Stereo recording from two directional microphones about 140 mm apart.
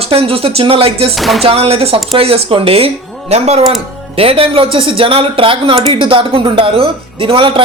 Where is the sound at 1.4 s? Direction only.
45° right (ahead or behind).